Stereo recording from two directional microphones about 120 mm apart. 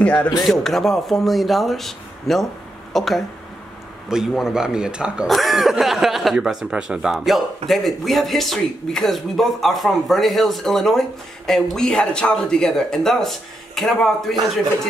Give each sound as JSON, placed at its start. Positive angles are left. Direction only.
{"t": 0.0, "sound": "speech", "side_deg": 10}